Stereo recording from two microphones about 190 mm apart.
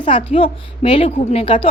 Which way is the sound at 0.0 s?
25° left (ahead or behind).